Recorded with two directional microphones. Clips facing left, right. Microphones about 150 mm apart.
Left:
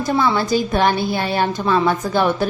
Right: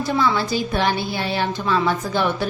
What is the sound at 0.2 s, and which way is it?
A woman's voice, 45° left (ahead or behind).